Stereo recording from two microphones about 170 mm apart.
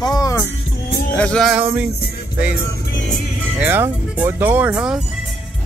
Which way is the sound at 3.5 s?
10° right (ahead or behind).